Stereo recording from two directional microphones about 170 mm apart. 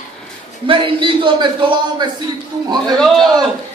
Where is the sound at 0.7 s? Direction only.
30° right (ahead or behind).